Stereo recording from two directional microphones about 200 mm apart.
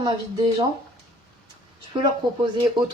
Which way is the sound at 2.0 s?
20° right (ahead or behind).